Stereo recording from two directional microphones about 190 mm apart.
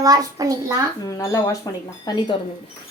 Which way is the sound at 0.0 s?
20° right (ahead or behind).